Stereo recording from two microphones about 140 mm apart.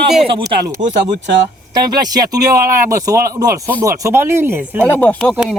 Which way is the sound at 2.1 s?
25° right (ahead or behind).